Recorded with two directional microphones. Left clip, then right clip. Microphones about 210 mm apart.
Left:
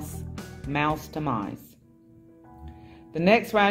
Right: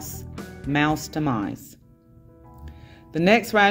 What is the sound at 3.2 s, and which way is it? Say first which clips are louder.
Speech: right 2 dB; 45° right (ahead or behind).